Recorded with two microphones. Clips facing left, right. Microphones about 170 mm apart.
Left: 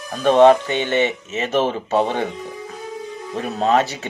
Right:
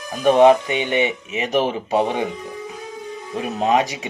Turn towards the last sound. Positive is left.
turn(degrees=-15)  # may be behind; listen again after turning